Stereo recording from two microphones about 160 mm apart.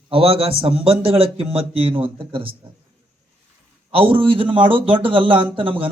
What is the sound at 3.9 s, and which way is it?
Speech, 35° right (ahead or behind).